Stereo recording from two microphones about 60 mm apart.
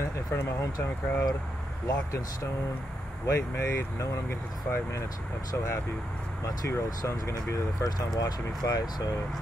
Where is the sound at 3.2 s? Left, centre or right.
Left.